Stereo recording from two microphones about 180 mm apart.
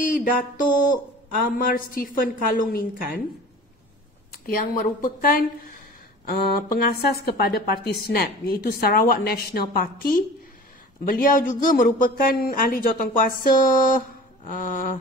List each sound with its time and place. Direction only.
0.0 s a sound: 50° left (ahead or behind)
1.4 s speech: 55° left (ahead or behind)
4.3 s a woman's voice: 55° left (ahead or behind)